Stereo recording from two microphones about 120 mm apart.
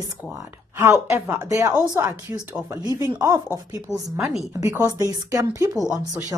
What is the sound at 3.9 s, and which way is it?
Speech, 25° left (ahead or behind).